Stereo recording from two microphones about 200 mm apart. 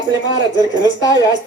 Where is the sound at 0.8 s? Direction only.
20° left (ahead or behind).